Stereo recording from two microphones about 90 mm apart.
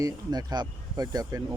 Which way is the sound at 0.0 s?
45° right (ahead or behind).